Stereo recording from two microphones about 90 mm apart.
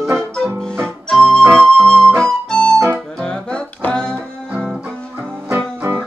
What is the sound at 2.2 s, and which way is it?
Music, 10° left (ahead or behind).